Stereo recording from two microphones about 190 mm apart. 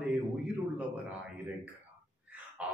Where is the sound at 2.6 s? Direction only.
5° right (ahead or behind).